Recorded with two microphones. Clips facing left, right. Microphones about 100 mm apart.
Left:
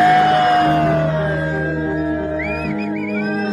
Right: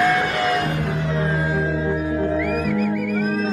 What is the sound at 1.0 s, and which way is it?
Music, 35° left (ahead or behind).